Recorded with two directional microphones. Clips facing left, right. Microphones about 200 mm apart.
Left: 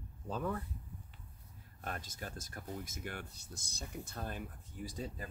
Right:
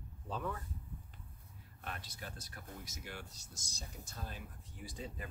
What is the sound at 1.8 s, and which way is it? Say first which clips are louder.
Speech: left 4 dB; 40° left (ahead or behind).